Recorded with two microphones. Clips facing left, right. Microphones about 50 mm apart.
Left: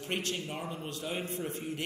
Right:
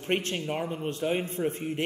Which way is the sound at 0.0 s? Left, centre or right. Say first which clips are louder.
Right 6 dB; right.